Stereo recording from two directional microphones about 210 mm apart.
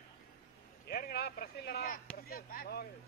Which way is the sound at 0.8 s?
45° left (ahead or behind).